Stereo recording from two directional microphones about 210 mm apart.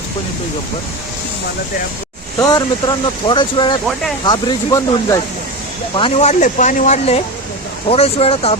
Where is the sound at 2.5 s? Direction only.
20° left (ahead or behind).